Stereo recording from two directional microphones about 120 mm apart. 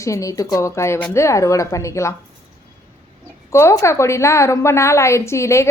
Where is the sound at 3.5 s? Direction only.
25° left (ahead or behind).